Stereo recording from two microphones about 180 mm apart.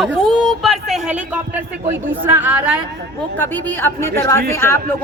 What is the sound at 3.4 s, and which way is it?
Speech, 10° left (ahead or behind).